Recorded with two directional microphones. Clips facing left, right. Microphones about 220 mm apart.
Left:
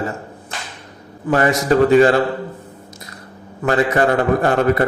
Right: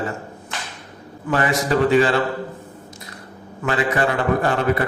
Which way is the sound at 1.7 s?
45° left (ahead or behind).